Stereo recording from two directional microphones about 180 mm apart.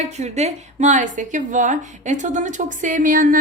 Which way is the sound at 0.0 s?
40° right (ahead or behind).